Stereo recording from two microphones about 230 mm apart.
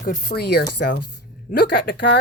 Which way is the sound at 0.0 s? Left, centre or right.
Left.